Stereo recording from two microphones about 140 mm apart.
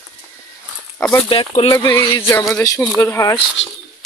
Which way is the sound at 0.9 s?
5° left (ahead or behind).